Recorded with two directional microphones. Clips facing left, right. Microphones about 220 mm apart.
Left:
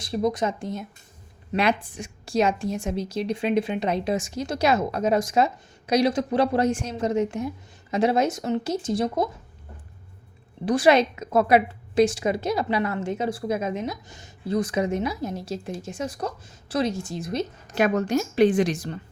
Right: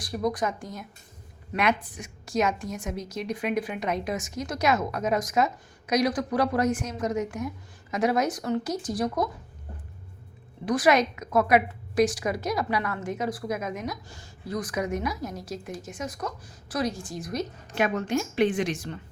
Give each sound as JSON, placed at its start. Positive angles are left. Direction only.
{"t": 0.0, "sound": "a woman's voice", "side_deg": 25}
{"t": 10.7, "sound": "a woman's voice", "side_deg": 30}
{"t": 17.7, "sound": "a woman's voice", "side_deg": 40}